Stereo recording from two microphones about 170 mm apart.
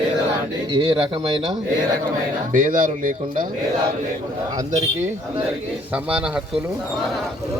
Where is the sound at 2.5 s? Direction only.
50° right (ahead or behind).